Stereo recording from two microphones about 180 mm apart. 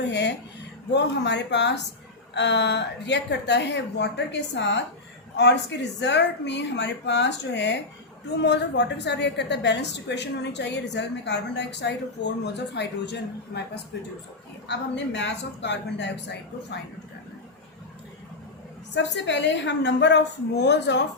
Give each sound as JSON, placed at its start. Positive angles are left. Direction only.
{"t": 0.1, "sound": "a sound", "side_deg": 70}
{"t": 0.9, "sound": "a woman's voice", "side_deg": 75}
{"t": 14.7, "sound": "a woman's voice", "side_deg": 80}
{"t": 18.9, "sound": "a woman's voice", "side_deg": 80}